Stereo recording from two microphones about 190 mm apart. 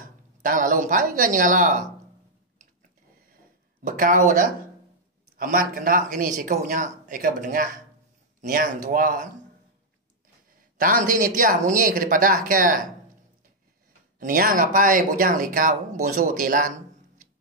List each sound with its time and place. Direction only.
0.0 s speech: 45° right (ahead or behind)
3.8 s speech: 45° right (ahead or behind)
10.8 s speech: 45° right (ahead or behind)
14.2 s speech: 45° right (ahead or behind)